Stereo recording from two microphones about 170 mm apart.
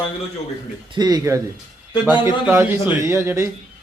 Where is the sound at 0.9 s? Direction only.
25° right (ahead or behind).